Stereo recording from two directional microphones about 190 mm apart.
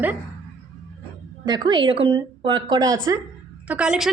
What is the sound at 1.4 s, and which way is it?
Speech, 25° right (ahead or behind).